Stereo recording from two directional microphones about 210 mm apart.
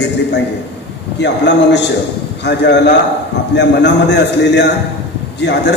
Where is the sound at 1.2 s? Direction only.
55° left (ahead or behind).